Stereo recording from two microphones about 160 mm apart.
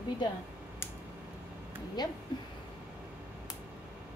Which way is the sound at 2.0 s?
25° left (ahead or behind).